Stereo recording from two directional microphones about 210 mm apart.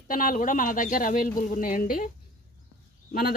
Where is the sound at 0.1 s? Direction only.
40° left (ahead or behind).